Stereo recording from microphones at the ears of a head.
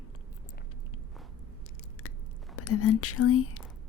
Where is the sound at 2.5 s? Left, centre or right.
Left.